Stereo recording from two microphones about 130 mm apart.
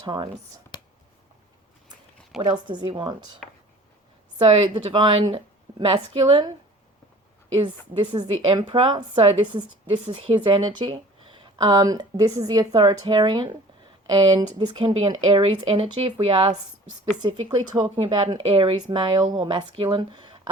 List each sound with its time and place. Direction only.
0.0 s speech: 35° right (ahead or behind)
2.4 s speech: 35° right (ahead or behind)
4.4 s speech: 40° right (ahead or behind)
7.6 s speech: 40° right (ahead or behind)